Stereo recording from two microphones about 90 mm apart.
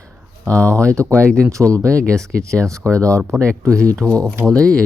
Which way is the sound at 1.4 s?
35° right (ahead or behind).